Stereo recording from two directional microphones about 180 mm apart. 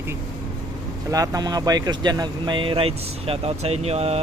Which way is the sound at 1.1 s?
20° right (ahead or behind).